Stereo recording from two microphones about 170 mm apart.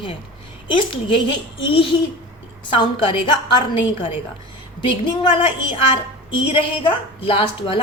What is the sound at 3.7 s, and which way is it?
A woman's voice, 30° left (ahead or behind).